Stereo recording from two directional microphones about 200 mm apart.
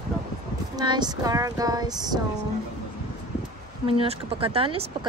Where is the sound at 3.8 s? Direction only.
30° right (ahead or behind).